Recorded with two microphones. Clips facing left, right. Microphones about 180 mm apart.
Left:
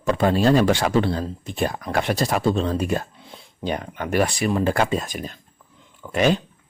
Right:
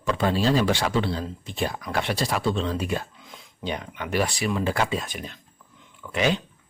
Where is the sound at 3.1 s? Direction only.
30° left (ahead or behind).